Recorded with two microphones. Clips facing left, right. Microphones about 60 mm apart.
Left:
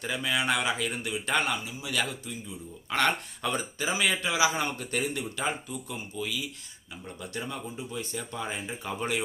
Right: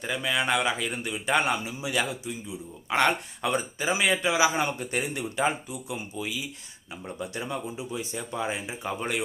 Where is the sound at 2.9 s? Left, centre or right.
Centre.